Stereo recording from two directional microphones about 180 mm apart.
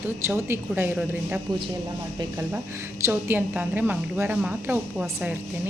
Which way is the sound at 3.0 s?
10° right (ahead or behind).